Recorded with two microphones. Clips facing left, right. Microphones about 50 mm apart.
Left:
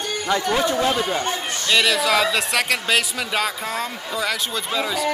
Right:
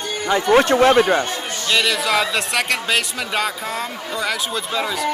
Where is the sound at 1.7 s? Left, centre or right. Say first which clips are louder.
Even; centre.